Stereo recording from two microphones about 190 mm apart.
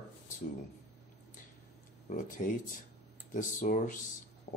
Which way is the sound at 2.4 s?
40° left (ahead or behind).